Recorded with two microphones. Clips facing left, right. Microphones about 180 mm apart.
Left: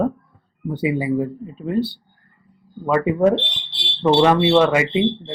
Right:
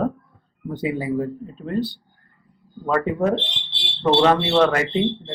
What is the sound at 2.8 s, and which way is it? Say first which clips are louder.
Speech: left 4 dB; 5° left (ahead or behind).